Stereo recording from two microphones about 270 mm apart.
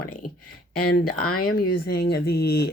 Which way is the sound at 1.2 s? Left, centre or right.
Left.